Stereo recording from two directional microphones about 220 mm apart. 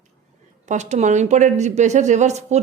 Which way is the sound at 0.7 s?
30° right (ahead or behind).